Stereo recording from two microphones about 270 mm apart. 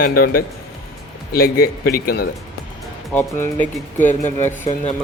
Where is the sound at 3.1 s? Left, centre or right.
Centre.